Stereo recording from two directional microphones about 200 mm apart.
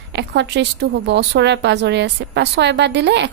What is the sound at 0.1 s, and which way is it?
A woman's voice, 60° right (ahead or behind).